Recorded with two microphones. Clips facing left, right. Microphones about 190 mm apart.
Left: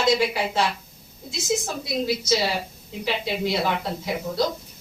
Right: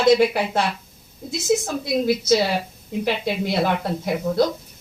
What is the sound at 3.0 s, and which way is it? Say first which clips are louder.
Speech: right 1 dB; 55° right (ahead or behind).